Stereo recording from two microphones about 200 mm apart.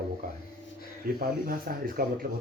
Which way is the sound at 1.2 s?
45° right (ahead or behind).